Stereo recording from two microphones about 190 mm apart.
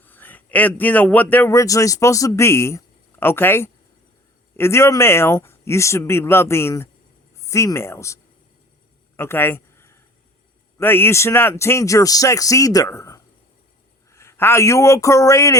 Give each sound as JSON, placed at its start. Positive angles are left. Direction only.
{"t": 0.0, "sound": "a man's voice", "side_deg": 10}
{"t": 9.1, "sound": "a sound", "side_deg": 10}
{"t": 10.8, "sound": "speech", "side_deg": 10}